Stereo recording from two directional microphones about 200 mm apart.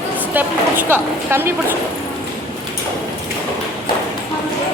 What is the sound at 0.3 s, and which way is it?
A woman's voice, 10° right (ahead or behind).